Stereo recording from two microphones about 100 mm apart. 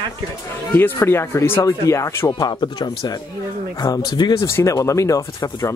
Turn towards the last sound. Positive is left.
turn(degrees=35)  # may be behind; listen again after turning